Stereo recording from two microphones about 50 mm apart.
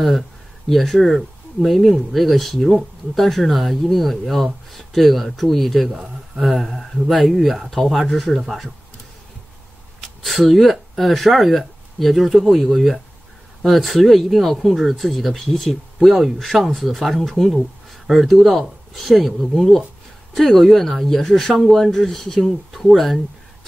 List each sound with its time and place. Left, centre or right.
0.7 s speech: centre
10.0 s speech: centre